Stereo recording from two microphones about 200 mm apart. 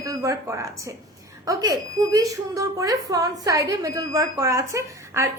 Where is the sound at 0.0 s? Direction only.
15° right (ahead or behind).